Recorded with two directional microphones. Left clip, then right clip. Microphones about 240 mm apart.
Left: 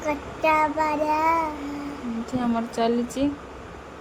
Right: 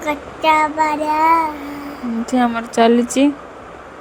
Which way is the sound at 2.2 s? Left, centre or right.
Right.